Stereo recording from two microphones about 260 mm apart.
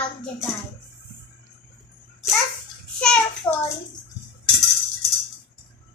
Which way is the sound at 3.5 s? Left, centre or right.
Centre.